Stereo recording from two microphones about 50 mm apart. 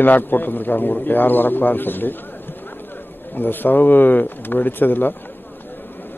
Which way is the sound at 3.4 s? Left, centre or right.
Left.